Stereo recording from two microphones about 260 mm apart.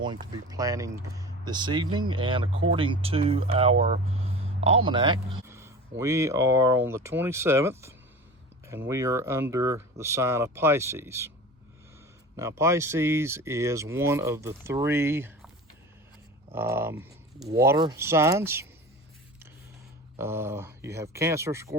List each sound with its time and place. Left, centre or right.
0.0 s speech: centre
12.4 s speech: centre
16.6 s speech: centre
20.1 s speech: centre